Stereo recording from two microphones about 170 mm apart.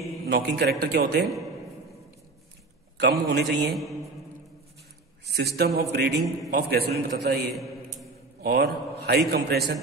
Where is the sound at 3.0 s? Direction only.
80° right.